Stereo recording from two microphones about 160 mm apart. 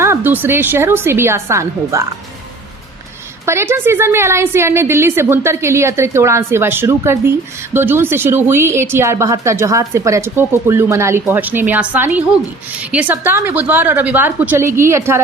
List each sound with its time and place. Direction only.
0.0 s a woman's voice: 15° right (ahead or behind)
3.4 s a woman's voice: 15° right (ahead or behind)